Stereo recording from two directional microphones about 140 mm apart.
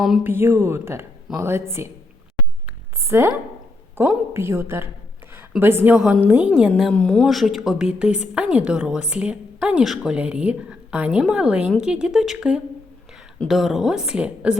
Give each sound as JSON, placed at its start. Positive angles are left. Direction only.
{"t": 0.2, "sound": "a woman's voice", "side_deg": -15}
{"t": 2.6, "sound": "a sound", "side_deg": -15}
{"t": 4.4, "sound": "a woman's voice", "side_deg": -20}